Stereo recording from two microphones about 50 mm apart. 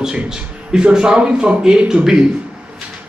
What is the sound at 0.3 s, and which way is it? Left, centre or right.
Speech, centre.